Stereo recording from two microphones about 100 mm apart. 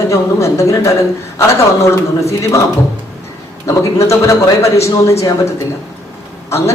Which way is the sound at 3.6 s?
30° left (ahead or behind).